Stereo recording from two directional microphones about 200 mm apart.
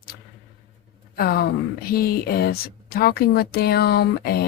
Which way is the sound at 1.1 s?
50° left (ahead or behind).